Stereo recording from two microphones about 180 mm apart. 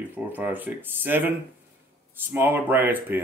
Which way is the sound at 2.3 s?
10° right (ahead or behind).